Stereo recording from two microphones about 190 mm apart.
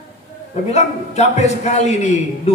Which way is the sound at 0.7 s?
35° left (ahead or behind).